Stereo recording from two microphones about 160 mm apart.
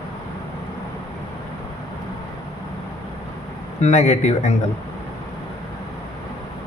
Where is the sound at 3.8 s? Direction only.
45° left (ahead or behind).